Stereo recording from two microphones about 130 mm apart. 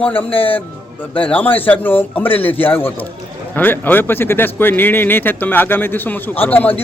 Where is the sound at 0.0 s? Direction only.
10° left (ahead or behind).